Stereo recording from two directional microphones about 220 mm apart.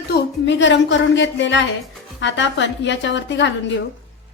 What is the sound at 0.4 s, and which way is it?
A woman's voice, 55° left (ahead or behind).